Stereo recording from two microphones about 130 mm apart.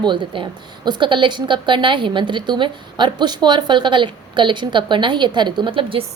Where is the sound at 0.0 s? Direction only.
35° right (ahead or behind).